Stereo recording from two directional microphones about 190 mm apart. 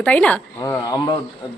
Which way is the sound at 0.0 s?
5° left (ahead or behind).